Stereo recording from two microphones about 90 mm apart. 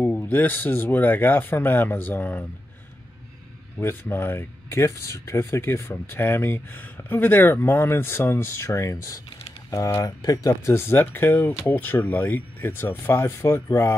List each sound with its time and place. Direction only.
0.2 s speech: 20° left (ahead or behind)
3.8 s speech: 25° left (ahead or behind)